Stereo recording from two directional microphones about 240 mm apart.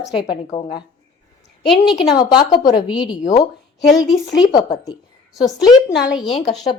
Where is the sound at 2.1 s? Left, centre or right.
Centre.